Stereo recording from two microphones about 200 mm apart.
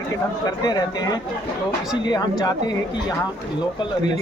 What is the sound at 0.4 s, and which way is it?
Speech, 20° left (ahead or behind).